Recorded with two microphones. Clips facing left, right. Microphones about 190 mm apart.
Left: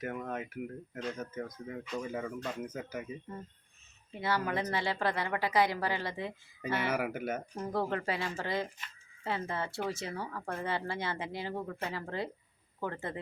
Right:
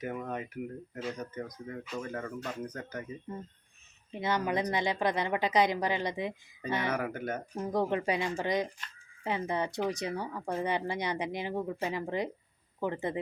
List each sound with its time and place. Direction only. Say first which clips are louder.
0.0 s speech: right 1 dB; centre (ahead or behind)
4.1 s a woman's voice: right 2 dB; 20° right (ahead or behind)
6.7 s speech: even; 10° left (ahead or behind)
7.5 s speech: right 6 dB; 15° right (ahead or behind)